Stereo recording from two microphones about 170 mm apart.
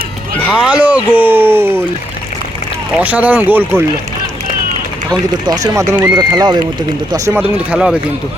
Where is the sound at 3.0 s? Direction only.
10° right (ahead or behind).